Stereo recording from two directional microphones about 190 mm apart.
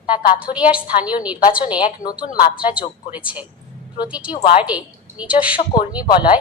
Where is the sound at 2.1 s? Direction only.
20° left (ahead or behind).